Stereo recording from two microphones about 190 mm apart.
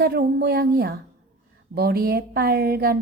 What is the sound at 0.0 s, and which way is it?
A woman's voice, 55° right (ahead or behind).